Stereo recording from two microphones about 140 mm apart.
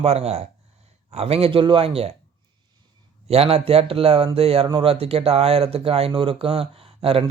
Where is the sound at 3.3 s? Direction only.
45° right (ahead or behind).